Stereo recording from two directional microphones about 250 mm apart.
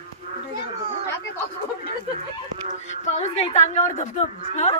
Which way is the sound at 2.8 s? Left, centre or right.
Left.